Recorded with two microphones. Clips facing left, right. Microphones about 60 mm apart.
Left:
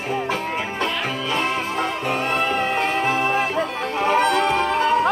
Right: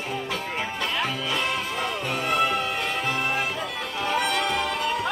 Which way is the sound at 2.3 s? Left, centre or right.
Left.